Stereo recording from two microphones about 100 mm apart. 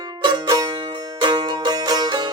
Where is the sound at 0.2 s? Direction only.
45° right (ahead or behind).